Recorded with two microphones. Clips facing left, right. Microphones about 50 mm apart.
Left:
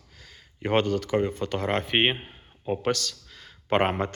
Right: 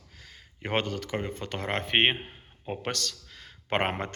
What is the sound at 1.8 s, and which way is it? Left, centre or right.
Speech, right.